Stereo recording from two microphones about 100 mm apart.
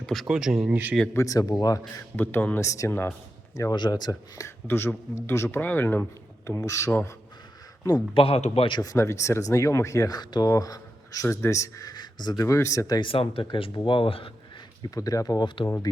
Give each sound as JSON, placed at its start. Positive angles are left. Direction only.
{"t": 0.0, "sound": "speech", "side_deg": 5}
{"t": 0.7, "sound": "speech", "side_deg": -15}
{"t": 1.1, "sound": "speech", "side_deg": 35}
{"t": 2.1, "sound": "speech", "side_deg": 20}
{"t": 2.6, "sound": "speech", "side_deg": 30}
{"t": 3.8, "sound": "speech", "side_deg": 45}
{"t": 4.1, "sound": "speech", "side_deg": 30}
{"t": 8.1, "sound": "a man's voice", "side_deg": 70}
{"t": 8.7, "sound": "speech", "side_deg": 40}
{"t": 12.9, "sound": "speech", "side_deg": 55}
{"t": 13.4, "sound": "speech", "side_deg": 50}
{"t": 14.8, "sound": "speech", "side_deg": 40}